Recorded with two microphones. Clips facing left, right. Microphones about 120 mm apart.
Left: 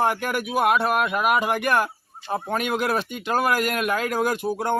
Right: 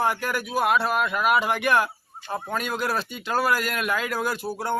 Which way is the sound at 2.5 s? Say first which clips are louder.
Left 3 dB; 60° left (ahead or behind).